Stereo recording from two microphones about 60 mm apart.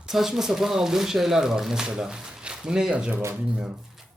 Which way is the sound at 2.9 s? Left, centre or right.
Right.